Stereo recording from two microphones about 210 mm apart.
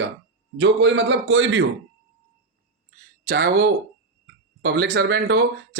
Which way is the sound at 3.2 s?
45° right (ahead or behind).